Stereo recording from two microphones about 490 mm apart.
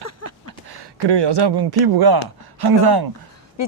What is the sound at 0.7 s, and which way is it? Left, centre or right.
Speech, right.